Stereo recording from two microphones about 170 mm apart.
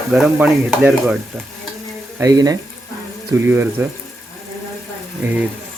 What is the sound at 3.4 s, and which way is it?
Stir, 15° right (ahead or behind).